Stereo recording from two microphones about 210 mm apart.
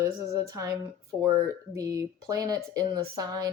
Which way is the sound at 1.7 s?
15° right (ahead or behind).